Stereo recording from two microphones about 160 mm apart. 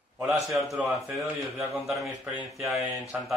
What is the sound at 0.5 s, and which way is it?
Speech, centre (ahead or behind).